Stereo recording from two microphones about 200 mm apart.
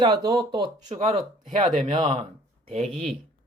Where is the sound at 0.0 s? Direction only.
20° right (ahead or behind).